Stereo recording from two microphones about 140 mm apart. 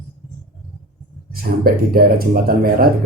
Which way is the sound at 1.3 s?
90° right.